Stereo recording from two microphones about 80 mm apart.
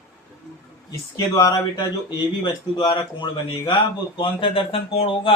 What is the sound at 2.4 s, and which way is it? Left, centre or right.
A man's voice, left.